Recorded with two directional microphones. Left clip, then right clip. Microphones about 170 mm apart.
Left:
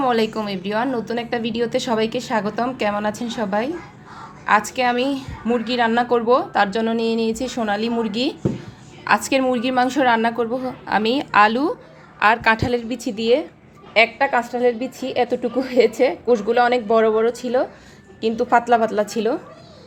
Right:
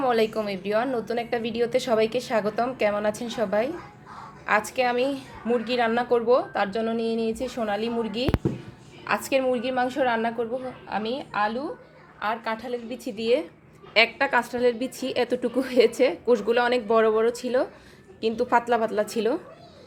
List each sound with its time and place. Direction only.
0.0 s a woman's voice: 5° left (ahead or behind); by 10.5 s 20° left (ahead or behind)
10.8 s a woman's voice: 35° left (ahead or behind)
13.0 s a woman's voice: 15° left (ahead or behind)
13.9 s a woman's voice: centre (ahead or behind)